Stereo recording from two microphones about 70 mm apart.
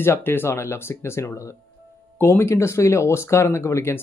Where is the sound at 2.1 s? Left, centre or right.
Left.